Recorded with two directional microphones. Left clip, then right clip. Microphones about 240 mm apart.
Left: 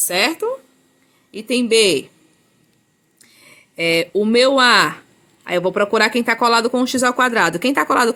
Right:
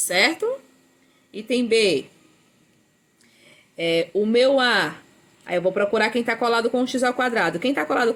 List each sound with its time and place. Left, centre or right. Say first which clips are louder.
0.1 s a man's voice: left 1 dB; left
3.8 s speech: left 4 dB; left